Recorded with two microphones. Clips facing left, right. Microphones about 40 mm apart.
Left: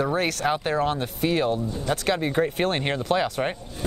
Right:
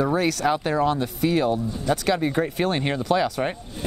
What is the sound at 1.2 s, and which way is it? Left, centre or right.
Speech, left.